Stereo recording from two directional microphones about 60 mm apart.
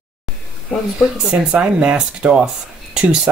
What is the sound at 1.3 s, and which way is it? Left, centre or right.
Speech, centre.